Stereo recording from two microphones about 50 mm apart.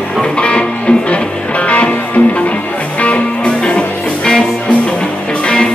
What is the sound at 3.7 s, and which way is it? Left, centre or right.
Music, left.